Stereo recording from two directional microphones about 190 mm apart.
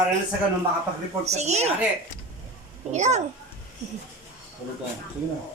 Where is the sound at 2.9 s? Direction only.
35° right (ahead or behind).